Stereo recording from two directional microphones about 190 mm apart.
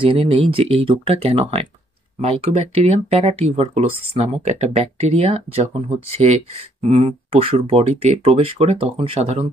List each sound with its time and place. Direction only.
0.0 s speech: 30° right (ahead or behind)